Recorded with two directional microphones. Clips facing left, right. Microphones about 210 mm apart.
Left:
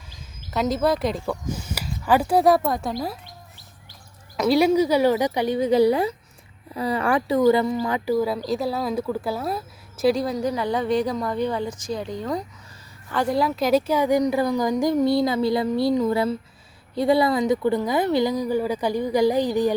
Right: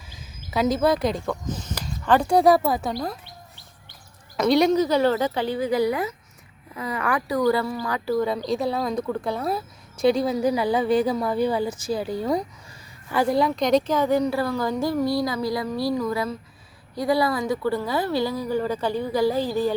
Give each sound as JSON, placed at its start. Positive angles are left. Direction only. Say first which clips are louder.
{"t": 0.1, "sound": "speech", "louder": "right 1 dB", "side_deg": -5}
{"t": 4.4, "sound": "a woman's voice", "louder": "left 1 dB", "side_deg": 5}
{"t": 8.1, "sound": "a woman's voice", "louder": "right 1 dB", "side_deg": 5}